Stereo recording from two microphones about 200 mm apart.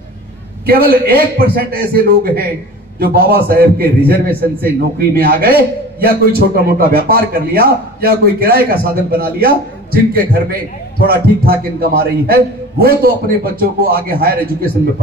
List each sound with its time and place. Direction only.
0.7 s a man's voice: 50° right (ahead or behind)